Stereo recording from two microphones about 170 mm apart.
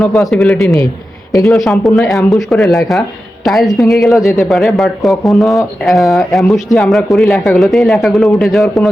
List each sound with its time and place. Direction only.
0.0 s speech: centre (ahead or behind)
4.2 s a man's voice: 15° left (ahead or behind)
4.4 s speech: centre (ahead or behind)